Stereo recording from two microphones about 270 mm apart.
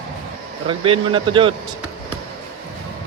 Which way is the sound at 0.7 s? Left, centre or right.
Centre.